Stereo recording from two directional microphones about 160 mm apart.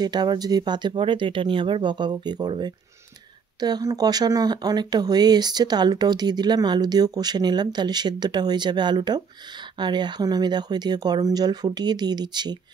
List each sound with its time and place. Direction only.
0.0 s speech: 25° right (ahead or behind)